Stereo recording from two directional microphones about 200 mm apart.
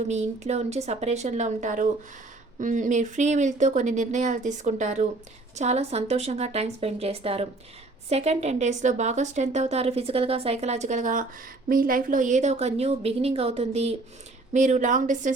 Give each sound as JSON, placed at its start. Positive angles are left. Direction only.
{"t": 0.1, "sound": "a woman's voice", "side_deg": -35}